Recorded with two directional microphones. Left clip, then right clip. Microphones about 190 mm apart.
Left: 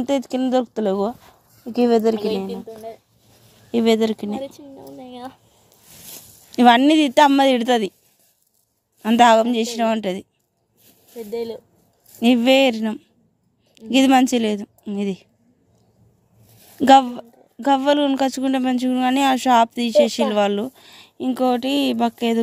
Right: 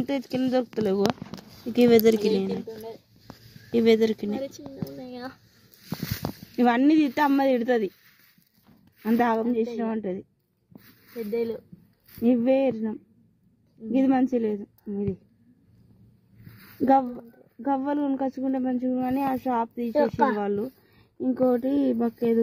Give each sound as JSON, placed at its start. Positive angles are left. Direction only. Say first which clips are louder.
{"t": 0.0, "sound": "speech", "louder": "left 6 dB", "side_deg": 5}
{"t": 1.6, "sound": "speech", "louder": "left 1 dB", "side_deg": -15}
{"t": 3.7, "sound": "speech", "louder": "left 2 dB", "side_deg": 0}
{"t": 4.5, "sound": "speech", "louder": "even", "side_deg": -15}
{"t": 5.0, "sound": "a sound", "louder": "left 3 dB", "side_deg": -10}
{"t": 6.5, "sound": "speech", "louder": "left 8 dB", "side_deg": 10}
{"t": 9.0, "sound": "a woman's voice", "louder": "left 11 dB", "side_deg": 20}
{"t": 11.3, "sound": "speech", "louder": "left 1 dB", "side_deg": -10}
{"t": 12.2, "sound": "a woman's voice", "louder": "left 7 dB", "side_deg": 25}
{"t": 16.8, "sound": "a woman's voice", "louder": "left 9 dB", "side_deg": 25}
{"t": 21.5, "sound": "speech", "louder": "left 5 dB", "side_deg": -5}